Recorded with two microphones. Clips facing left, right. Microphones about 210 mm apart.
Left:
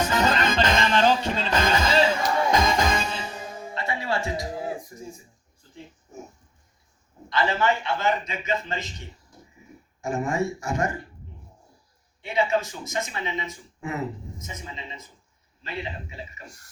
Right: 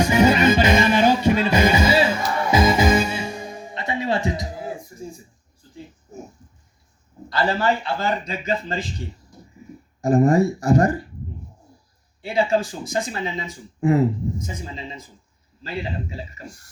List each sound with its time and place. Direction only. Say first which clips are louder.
0.0 s music: right 7 dB; 10° right (ahead or behind)
7.3 s speech: right 3 dB; 35° right (ahead or behind)
12.2 s speech: right 4 dB; 30° right (ahead or behind)